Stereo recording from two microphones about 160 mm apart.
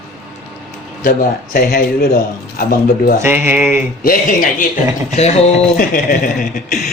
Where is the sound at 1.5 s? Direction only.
70° left (ahead or behind).